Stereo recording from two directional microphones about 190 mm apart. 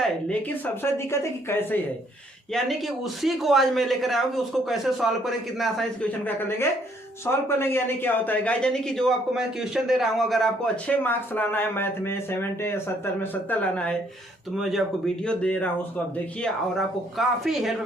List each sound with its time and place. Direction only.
0.0 s speech: 5° left (ahead or behind)
2.5 s speech: centre (ahead or behind)